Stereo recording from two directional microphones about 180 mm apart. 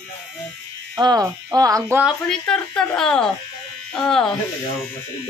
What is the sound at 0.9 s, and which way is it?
Speech, 20° right (ahead or behind).